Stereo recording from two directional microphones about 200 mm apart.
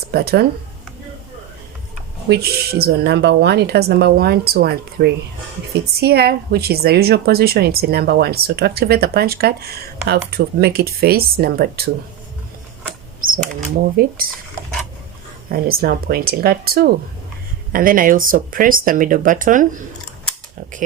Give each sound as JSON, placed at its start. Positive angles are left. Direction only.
{"t": 0.1, "sound": "a woman's voice", "side_deg": -50}
{"t": 2.3, "sound": "a woman's voice", "side_deg": -55}
{"t": 13.3, "sound": "a woman's voice", "side_deg": -45}
{"t": 15.5, "sound": "a woman's voice", "side_deg": -45}